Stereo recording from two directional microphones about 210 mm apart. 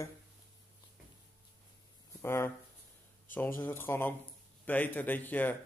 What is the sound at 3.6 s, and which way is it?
Speech, 10° left (ahead or behind).